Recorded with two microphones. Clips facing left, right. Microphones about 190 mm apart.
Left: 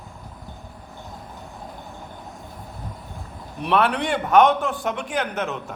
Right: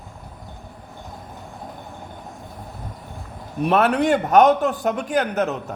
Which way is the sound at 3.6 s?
45° right (ahead or behind).